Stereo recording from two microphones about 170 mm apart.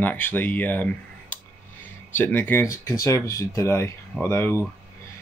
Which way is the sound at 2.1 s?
10° left (ahead or behind).